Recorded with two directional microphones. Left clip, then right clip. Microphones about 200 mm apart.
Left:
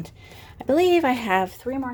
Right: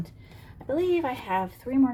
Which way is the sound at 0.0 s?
60° left (ahead or behind).